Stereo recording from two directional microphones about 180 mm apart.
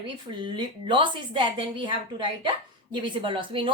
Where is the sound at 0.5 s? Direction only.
25° right (ahead or behind).